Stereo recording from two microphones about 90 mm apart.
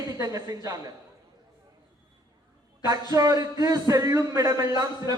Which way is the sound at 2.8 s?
45° right (ahead or behind).